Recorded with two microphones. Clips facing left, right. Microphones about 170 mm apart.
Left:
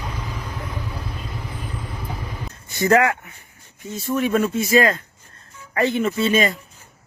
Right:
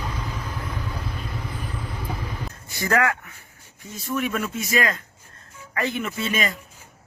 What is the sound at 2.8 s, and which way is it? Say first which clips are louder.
Speech: left 5 dB; 25° left (ahead or behind).